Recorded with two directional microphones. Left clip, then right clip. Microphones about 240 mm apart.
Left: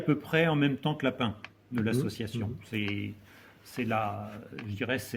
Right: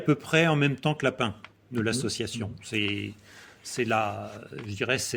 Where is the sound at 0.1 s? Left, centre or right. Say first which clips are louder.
Right 4 dB; right.